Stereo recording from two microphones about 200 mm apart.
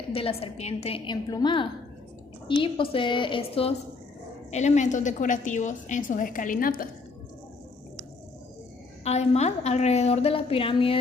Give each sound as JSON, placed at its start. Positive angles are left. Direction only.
{"t": 0.1, "sound": "a woman's voice", "side_deg": 30}
{"t": 9.0, "sound": "a woman's voice", "side_deg": 35}